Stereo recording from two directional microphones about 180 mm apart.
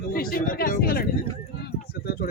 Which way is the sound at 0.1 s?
55° left (ahead or behind).